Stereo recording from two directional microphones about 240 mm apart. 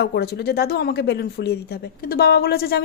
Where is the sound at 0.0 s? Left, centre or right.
Left.